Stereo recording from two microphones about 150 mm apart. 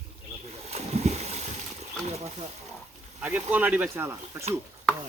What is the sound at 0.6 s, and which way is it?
Boat, 45° right (ahead or behind).